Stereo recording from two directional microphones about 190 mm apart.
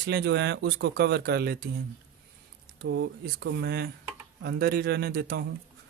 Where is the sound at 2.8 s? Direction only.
65° right (ahead or behind).